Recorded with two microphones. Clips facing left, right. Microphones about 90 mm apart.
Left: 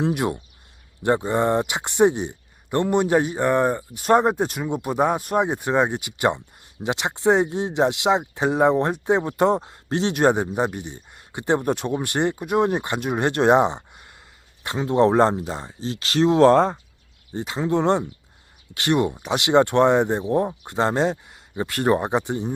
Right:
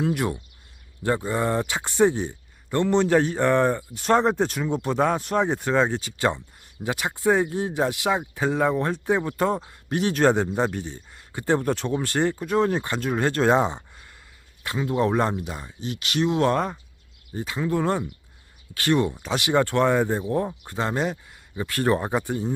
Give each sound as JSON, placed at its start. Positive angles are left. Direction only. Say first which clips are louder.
{"t": 0.0, "sound": "a man's voice", "louder": "left 2 dB", "side_deg": 20}